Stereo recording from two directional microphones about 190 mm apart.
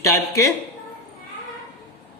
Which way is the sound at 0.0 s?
15° left (ahead or behind).